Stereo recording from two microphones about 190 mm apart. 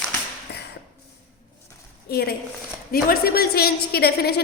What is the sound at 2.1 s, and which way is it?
A woman's voice, 55° left (ahead or behind).